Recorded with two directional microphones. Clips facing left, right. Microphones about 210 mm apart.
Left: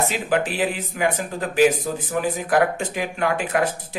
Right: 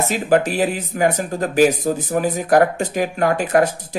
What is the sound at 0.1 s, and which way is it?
Speech, 40° right (ahead or behind).